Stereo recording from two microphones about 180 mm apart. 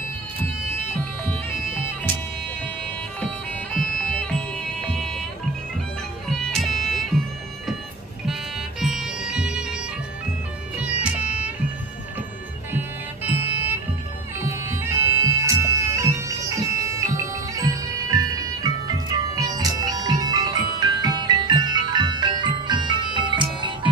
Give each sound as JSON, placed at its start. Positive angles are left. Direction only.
{"t": 4.0, "sound": "music", "side_deg": 5}
{"t": 6.4, "sound": "music", "side_deg": 0}
{"t": 10.8, "sound": "music", "side_deg": -5}
{"t": 12.7, "sound": "music", "side_deg": -10}
{"t": 14.4, "sound": "bagpipes", "side_deg": -15}
{"t": 19.2, "sound": "music", "side_deg": -20}